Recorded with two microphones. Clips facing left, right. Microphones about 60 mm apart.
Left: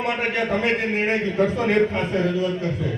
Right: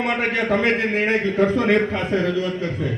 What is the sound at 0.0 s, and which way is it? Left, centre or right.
Speech, right.